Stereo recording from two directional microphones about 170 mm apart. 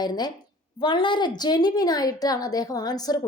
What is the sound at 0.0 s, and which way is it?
A woman's voice, 25° left (ahead or behind).